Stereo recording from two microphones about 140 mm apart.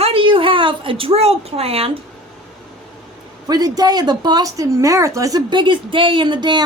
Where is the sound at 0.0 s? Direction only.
40° right (ahead or behind).